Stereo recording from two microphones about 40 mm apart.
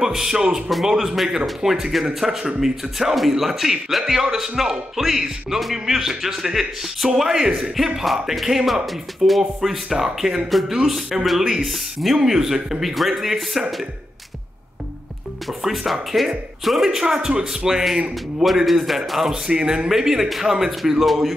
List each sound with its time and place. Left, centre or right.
0.0 s speech: centre
7.7 s speech: centre
15.4 s speech: centre
17.3 s speech: centre
19.4 s a man's voice: centre
19.9 s speech: centre